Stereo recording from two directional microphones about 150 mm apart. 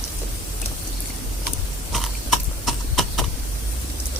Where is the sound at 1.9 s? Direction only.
Centre (ahead or behind).